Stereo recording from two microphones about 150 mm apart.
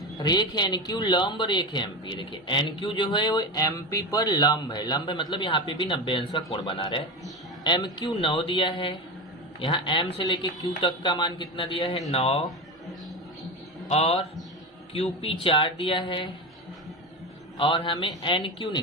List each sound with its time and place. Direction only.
0.2 s speech: 30° left (ahead or behind)
13.8 s a man's voice: 45° left (ahead or behind)
17.6 s speech: 35° left (ahead or behind)